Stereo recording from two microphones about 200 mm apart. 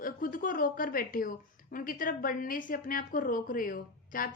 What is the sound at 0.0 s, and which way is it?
A woman's voice, 45° left (ahead or behind).